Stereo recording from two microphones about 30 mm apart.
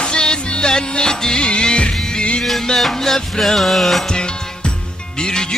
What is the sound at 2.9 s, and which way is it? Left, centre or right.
Music, centre.